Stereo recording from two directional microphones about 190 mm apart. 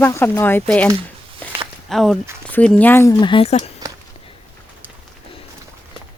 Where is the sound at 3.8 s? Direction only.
20° right (ahead or behind).